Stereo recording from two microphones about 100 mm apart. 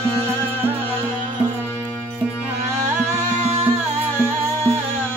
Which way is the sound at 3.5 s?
90° right.